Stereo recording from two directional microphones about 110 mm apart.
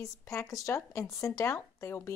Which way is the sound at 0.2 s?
25° left (ahead or behind).